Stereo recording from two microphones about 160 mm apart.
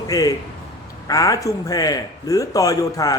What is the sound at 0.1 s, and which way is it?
A man's voice, 20° left (ahead or behind).